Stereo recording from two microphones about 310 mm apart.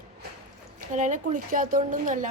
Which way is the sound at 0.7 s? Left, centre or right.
Right.